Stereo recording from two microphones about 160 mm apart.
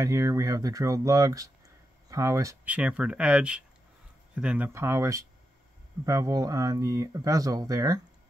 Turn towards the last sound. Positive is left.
turn(degrees=-20)  # may be behind; listen again after turning